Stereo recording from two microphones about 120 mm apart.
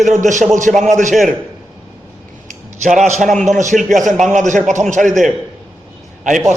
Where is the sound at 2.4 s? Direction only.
90° right.